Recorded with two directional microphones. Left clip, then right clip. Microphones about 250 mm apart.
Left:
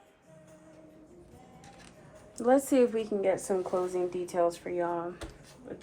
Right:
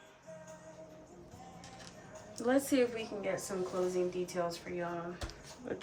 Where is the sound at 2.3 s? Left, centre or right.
Centre.